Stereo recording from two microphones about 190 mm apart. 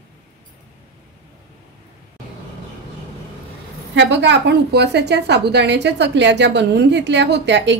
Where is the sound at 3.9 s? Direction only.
70° right (ahead or behind).